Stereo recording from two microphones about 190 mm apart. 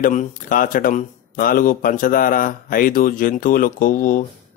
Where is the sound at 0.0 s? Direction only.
40° left (ahead or behind).